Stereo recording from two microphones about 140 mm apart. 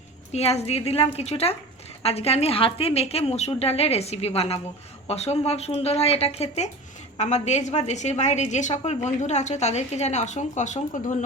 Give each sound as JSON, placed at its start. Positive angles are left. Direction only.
{"t": 0.3, "sound": "a woman's voice", "side_deg": 50}